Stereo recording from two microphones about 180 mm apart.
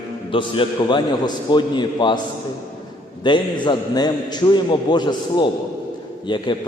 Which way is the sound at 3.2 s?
25° left (ahead or behind).